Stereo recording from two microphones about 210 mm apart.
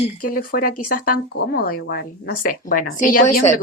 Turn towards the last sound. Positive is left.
turn(degrees=35)  # may be behind; listen again after turning